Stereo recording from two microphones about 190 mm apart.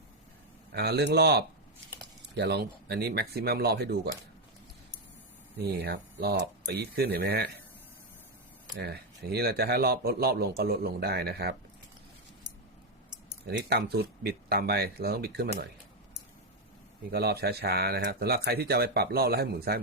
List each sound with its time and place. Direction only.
0.7 s speech: 60° right (ahead or behind)
5.5 s speech: 60° right (ahead or behind)
8.8 s speech: 55° right (ahead or behind)
13.5 s speech: 60° right (ahead or behind)
17.1 s speech: 55° right (ahead or behind)